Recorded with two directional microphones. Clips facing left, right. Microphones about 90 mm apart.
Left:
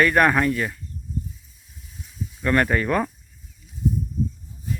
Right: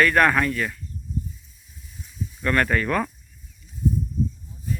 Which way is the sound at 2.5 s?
20° left (ahead or behind).